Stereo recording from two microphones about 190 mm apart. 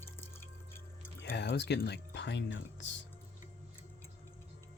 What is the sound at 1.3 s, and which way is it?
Speech, 65° left (ahead or behind).